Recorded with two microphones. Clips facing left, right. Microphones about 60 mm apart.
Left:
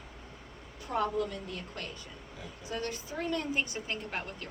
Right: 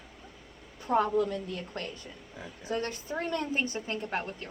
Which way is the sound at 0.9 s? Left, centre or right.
Right.